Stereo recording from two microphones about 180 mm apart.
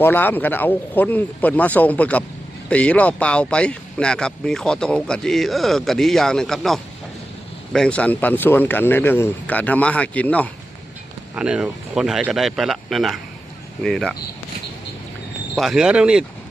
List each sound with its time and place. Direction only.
0.0 s speech: 10° left (ahead or behind)
11.3 s speech: 5° right (ahead or behind)
15.5 s speech: centre (ahead or behind)